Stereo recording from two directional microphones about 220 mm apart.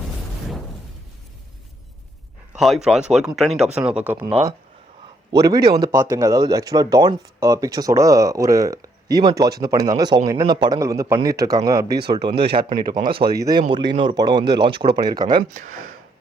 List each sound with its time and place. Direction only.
2.6 s speech: centre (ahead or behind)
5.6 s speech: 15° right (ahead or behind)